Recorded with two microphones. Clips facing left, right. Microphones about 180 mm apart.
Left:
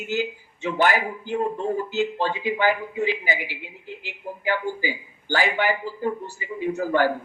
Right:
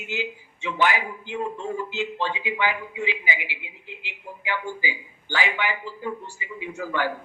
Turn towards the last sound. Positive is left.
turn(degrees=40)  # may be behind; listen again after turning